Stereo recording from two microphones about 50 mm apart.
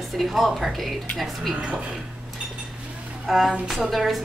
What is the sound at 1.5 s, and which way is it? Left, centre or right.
Speech, centre.